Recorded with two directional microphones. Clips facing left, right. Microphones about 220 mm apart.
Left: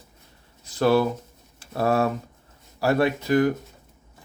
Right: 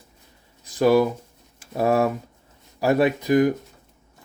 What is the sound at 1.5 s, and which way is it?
Speech, 15° right (ahead or behind).